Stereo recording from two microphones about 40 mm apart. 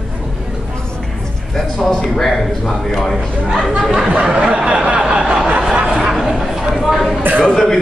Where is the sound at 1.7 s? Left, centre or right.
Centre.